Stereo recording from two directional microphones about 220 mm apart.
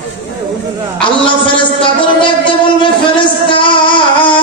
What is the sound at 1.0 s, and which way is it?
A man's voice, 20° left (ahead or behind).